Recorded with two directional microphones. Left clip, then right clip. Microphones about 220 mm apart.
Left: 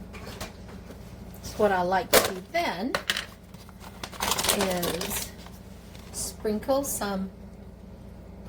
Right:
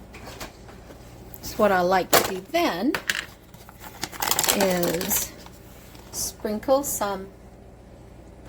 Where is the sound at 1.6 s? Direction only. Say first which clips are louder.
Right 4 dB; 55° right (ahead or behind).